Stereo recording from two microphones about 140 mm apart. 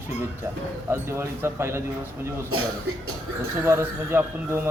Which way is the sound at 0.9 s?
20° right (ahead or behind).